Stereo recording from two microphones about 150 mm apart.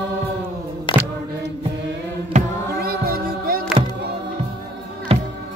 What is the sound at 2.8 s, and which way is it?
Music, 90° right.